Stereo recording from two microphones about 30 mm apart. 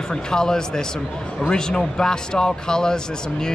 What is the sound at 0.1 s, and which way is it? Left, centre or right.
Speech, left.